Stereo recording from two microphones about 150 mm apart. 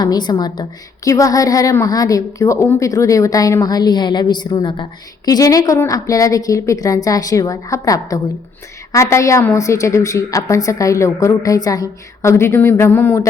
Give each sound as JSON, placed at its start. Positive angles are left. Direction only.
{"t": 0.0, "sound": "a woman's voice", "side_deg": 30}